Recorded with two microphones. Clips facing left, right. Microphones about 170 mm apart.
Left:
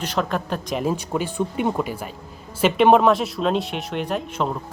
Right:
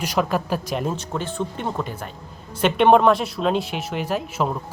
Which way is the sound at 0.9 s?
10° left (ahead or behind).